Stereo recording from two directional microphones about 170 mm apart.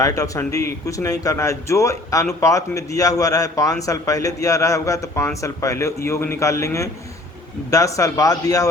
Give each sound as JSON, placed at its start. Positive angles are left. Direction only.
{"t": 0.0, "sound": "a man's voice", "side_deg": 20}